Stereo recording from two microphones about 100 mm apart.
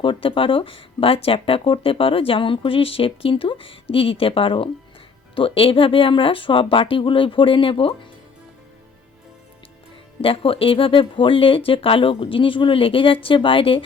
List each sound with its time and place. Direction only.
0.0 s speech: 60° left (ahead or behind)
10.2 s speech: 70° left (ahead or behind)